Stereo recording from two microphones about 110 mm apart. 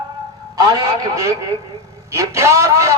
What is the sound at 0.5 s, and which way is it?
A man's voice, 35° right (ahead or behind).